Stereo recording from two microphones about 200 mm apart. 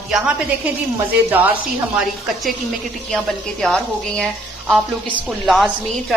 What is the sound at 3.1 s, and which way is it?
A woman's voice, 5° left (ahead or behind).